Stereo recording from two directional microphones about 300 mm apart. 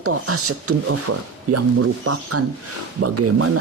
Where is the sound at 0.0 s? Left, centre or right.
Right.